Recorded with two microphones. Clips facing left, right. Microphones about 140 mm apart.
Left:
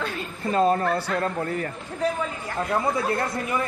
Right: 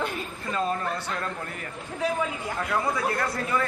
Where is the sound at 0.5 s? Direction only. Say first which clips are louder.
Left 7 dB; 40° left (ahead or behind).